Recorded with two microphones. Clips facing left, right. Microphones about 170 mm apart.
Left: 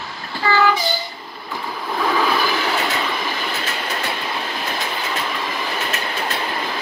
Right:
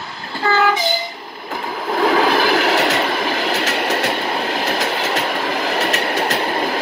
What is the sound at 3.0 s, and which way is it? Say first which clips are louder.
Train: right 5 dB; 70° right (ahead or behind).